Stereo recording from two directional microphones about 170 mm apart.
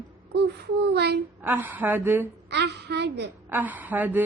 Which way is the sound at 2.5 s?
80° right.